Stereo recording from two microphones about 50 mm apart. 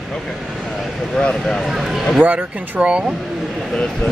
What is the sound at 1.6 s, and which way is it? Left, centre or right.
Speech, centre.